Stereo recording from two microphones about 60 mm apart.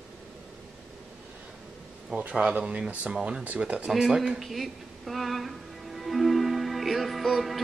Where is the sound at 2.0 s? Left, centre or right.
Centre.